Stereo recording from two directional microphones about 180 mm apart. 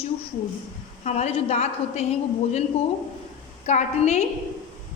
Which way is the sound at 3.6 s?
40° left (ahead or behind).